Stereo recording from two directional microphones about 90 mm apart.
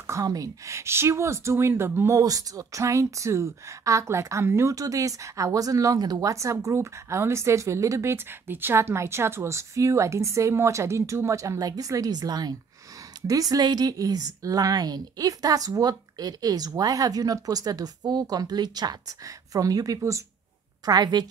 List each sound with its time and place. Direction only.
0.0 s a woman's voice: 40° right (ahead or behind)
20.8 s a woman's voice: 50° right (ahead or behind)